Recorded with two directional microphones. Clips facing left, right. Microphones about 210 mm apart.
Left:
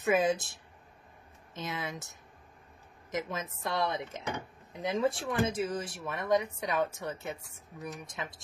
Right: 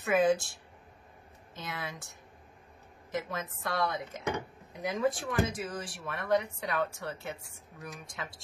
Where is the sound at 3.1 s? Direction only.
20° left (ahead or behind).